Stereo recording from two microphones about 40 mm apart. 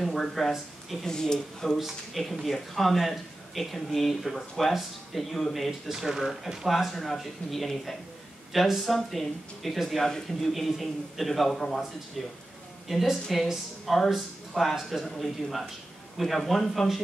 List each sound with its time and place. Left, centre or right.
0.0 s speech: centre
1.0 s speech: centre
2.4 s speech: centre
10.0 s speech: centre
10.5 s speech: centre